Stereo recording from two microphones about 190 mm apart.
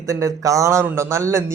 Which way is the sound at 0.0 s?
15° right (ahead or behind).